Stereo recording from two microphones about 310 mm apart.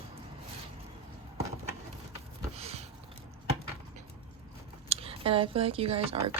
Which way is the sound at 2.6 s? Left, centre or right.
Centre.